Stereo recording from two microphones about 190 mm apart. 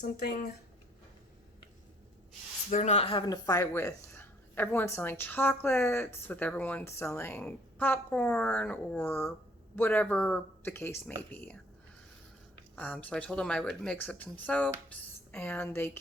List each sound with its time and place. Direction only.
0.0 s speech: 55° left (ahead or behind)
2.6 s speech: 35° left (ahead or behind); by 11.5 s 10° left (ahead or behind)
12.7 s speech: 10° left (ahead or behind)